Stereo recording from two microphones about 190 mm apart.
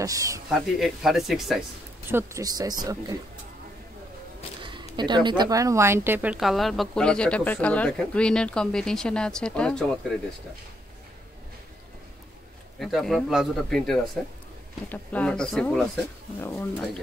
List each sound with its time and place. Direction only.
0.0 s speech: 15° right (ahead or behind)
0.5 s speech: centre (ahead or behind)
2.0 s speech: 15° right (ahead or behind)
4.6 s a sound: 25° right (ahead or behind)
4.9 s speech: 25° right (ahead or behind); by 9.9 s 5° left (ahead or behind)
12.7 s speech: centre (ahead or behind)